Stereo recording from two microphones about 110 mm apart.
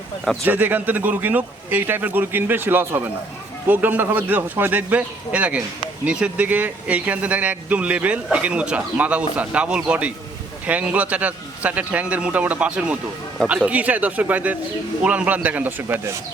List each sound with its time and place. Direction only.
0.4 s speech: 15° right (ahead or behind)